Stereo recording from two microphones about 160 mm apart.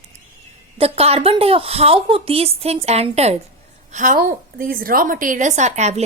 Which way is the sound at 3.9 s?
55° right (ahead or behind).